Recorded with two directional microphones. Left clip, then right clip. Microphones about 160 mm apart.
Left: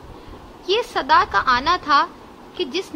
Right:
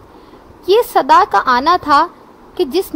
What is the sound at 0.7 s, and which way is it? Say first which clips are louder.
A woman's voice: right 8 dB; 70° right (ahead or behind).